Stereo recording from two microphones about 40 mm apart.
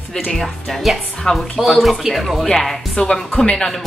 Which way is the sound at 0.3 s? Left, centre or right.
Centre.